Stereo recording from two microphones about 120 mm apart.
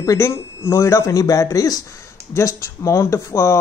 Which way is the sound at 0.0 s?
25° left (ahead or behind).